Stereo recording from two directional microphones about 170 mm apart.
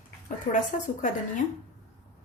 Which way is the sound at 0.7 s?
50° left (ahead or behind).